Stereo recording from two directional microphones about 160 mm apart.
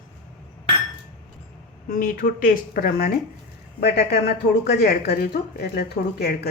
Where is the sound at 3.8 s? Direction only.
90° left.